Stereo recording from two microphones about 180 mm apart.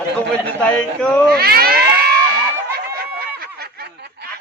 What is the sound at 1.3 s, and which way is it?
Speech, 60° right (ahead or behind).